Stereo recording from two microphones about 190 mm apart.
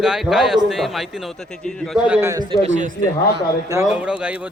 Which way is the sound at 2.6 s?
40° right (ahead or behind).